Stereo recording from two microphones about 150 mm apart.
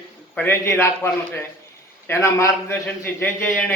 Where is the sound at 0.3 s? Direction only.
15° left (ahead or behind).